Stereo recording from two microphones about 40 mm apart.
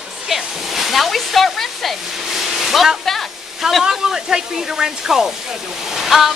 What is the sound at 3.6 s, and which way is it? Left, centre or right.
Speech, centre.